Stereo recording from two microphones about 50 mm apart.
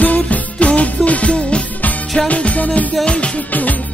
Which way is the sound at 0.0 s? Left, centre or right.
Left.